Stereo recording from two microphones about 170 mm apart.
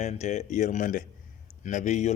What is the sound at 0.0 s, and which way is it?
A man's voice, 40° left (ahead or behind).